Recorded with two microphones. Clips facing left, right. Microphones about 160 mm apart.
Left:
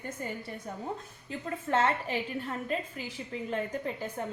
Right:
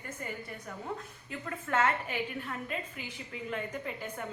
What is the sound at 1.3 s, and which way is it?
A woman's voice, 30° left (ahead or behind).